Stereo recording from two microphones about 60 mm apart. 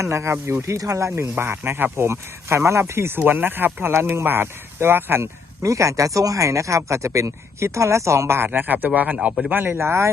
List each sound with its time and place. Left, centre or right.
0.0 s speech: right
0.8 s speech: right
3.2 s speech: right
5.6 s speech: right
8.5 s speech: right